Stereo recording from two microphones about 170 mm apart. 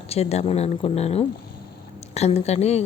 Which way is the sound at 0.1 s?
40° left (ahead or behind).